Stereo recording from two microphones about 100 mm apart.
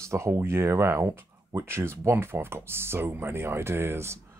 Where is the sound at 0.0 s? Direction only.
30° right (ahead or behind).